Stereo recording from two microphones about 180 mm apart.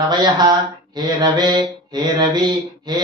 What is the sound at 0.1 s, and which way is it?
Mantra, 25° right (ahead or behind).